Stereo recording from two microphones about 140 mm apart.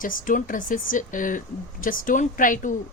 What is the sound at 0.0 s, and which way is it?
Speech, 80° left.